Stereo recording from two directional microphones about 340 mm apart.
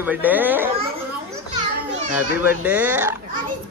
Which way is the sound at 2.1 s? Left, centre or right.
Centre.